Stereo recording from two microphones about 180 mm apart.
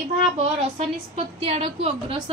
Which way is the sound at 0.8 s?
30° right (ahead or behind).